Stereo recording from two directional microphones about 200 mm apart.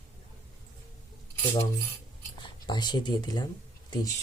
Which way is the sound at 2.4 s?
20° left (ahead or behind).